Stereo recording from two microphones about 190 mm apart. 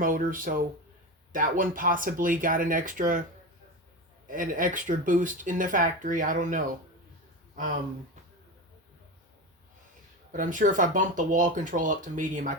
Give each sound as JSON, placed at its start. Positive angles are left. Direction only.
{"t": 0.0, "sound": "speech", "side_deg": -45}
{"t": 4.3, "sound": "speech", "side_deg": -45}
{"t": 10.3, "sound": "speech", "side_deg": -45}